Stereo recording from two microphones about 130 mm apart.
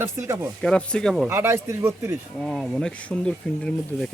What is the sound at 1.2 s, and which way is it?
Speech, 20° right (ahead or behind).